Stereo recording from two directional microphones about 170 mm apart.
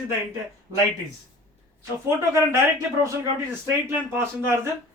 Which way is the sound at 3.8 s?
15° right (ahead or behind).